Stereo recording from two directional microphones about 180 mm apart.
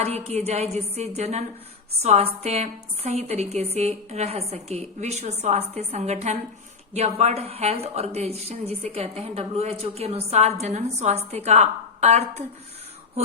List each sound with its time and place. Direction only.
0.0 s speech: 35° right (ahead or behind)